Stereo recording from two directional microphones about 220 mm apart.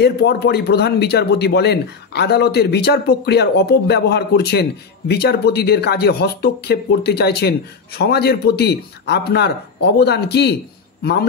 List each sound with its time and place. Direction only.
0.0 s speech: 50° left (ahead or behind)